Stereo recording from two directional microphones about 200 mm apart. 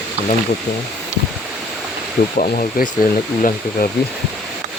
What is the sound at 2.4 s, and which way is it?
Speech, 40° left (ahead or behind).